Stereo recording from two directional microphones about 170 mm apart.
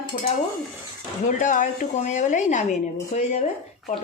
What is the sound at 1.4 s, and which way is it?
A woman's voice, 50° left (ahead or behind).